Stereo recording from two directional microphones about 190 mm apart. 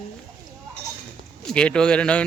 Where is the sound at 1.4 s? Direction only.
5° left (ahead or behind).